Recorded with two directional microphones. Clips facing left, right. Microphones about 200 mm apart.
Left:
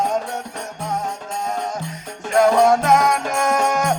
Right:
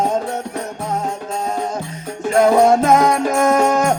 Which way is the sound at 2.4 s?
25° right (ahead or behind).